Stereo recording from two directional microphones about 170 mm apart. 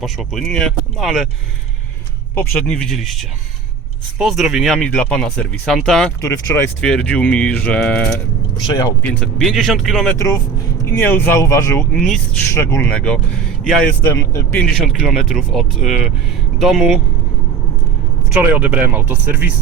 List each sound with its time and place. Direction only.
0.0 s speech: centre (ahead or behind)
2.3 s speech: 15° left (ahead or behind)
6.2 s speech: 15° left (ahead or behind)
8.6 s speech: 20° left (ahead or behind)
9.2 s speech: centre (ahead or behind)
10.2 s speech: 20° left (ahead or behind)
11.9 s speech: 5° left (ahead or behind)
12.5 s speech: 15° left (ahead or behind)
14.0 s speech: 15° left (ahead or behind); by 17.0 s 5° right (ahead or behind)
18.3 s speech: 10° right (ahead or behind)